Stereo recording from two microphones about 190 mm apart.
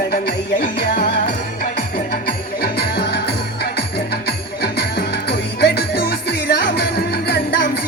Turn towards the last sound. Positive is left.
turn(degrees=60)  # may be behind; listen again after turning